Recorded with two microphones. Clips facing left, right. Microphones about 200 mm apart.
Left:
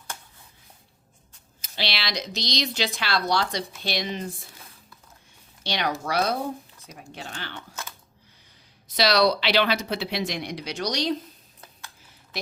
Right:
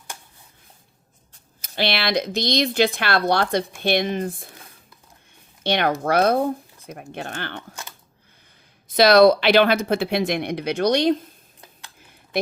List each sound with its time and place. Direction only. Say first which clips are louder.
1.6 s speech: right 8 dB; 55° right (ahead or behind)
5.6 s speech: right 7 dB; 55° right (ahead or behind)
9.0 s speech: right 8 dB; 50° right (ahead or behind)